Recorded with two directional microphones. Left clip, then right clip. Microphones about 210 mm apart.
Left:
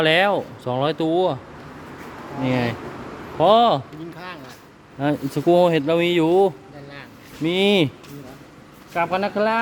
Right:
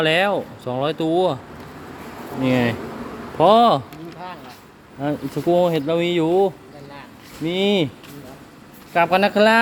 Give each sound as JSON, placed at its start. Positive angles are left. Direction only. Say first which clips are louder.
{"t": 0.0, "sound": "speech", "louder": "left 1 dB", "side_deg": 10}
{"t": 2.4, "sound": "a man's voice", "louder": "right 3 dB", "side_deg": -10}
{"t": 4.9, "sound": "speech", "louder": "left 2 dB", "side_deg": 15}
{"t": 8.9, "sound": "speech", "louder": "right 5 dB", "side_deg": -20}